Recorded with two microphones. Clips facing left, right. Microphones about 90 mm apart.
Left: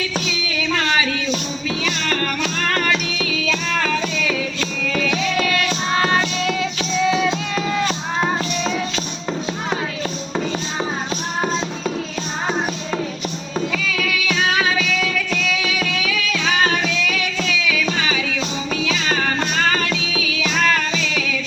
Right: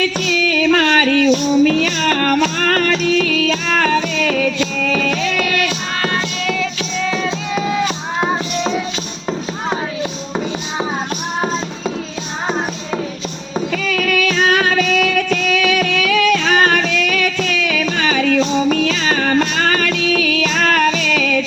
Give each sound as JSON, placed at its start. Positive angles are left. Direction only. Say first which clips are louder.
{"t": 0.0, "sound": "child singing", "louder": "right 7 dB", "side_deg": -55}
{"t": 4.8, "sound": "music", "louder": "right 3 dB", "side_deg": -50}
{"t": 6.0, "sound": "music", "louder": "left 1 dB", "side_deg": 20}
{"t": 7.5, "sound": "music", "louder": "right 3 dB", "side_deg": -5}
{"t": 12.5, "sound": "music", "louder": "right 3 dB", "side_deg": -5}
{"t": 13.7, "sound": "music", "louder": "right 6 dB", "side_deg": -50}